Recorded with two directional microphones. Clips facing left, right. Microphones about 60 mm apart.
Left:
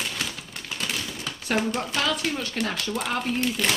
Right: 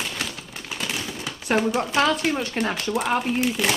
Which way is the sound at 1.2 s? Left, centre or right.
Centre.